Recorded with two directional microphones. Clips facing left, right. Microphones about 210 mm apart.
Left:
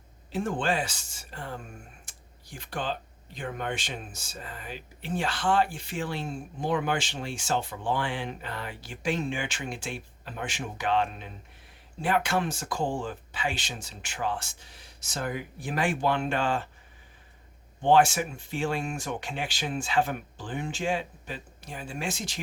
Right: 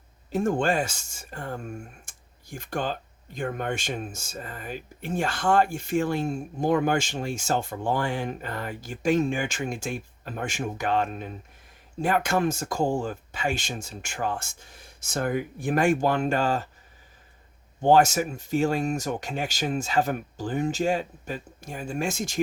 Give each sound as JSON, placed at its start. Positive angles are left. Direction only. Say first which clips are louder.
{"t": 0.3, "sound": "speech", "louder": "right 5 dB", "side_deg": -45}
{"t": 17.7, "sound": "speech", "louder": "right 2 dB", "side_deg": -40}